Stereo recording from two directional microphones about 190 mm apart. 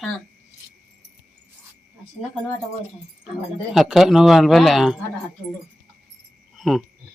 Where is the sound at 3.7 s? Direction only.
Centre (ahead or behind).